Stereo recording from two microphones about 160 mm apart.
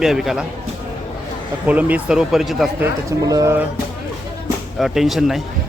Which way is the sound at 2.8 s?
20° right (ahead or behind).